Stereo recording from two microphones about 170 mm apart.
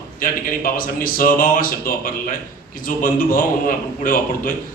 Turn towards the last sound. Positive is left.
turn(degrees=55)  # may be behind; listen again after turning